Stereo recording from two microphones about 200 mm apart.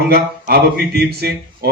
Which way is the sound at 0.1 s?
50° right (ahead or behind).